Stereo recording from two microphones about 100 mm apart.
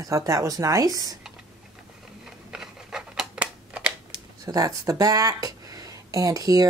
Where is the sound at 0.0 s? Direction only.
35° right (ahead or behind).